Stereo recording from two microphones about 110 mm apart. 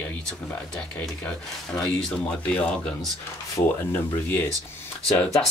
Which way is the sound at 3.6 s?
50° left (ahead or behind).